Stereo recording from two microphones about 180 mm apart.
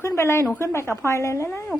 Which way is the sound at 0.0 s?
15° left (ahead or behind).